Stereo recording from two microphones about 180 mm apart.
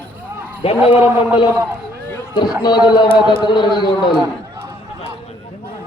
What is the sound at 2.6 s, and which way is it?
A man's voice, 25° left (ahead or behind).